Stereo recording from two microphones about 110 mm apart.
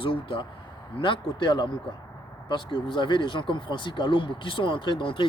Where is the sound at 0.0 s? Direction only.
50° left (ahead or behind).